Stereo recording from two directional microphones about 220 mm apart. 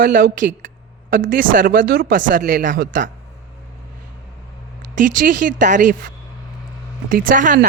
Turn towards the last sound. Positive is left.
turn(degrees=-35)  # may be behind; listen again after turning